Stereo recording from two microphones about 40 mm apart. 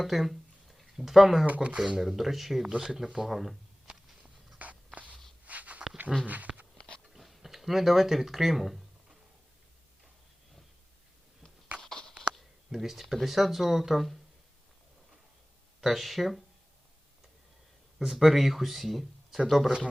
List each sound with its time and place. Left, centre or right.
0.0 s speech: centre
1.5 s speech: right
2.0 s speech: centre
3.8 s walk: right
4.5 s a sound: right
6.2 s speech: right
6.7 s biting: left
7.1 s a sound: centre
11.7 s a sound: right
12.3 s a sound: centre
13.2 s speech: centre
15.8 s speech: centre
18.0 s speech: centre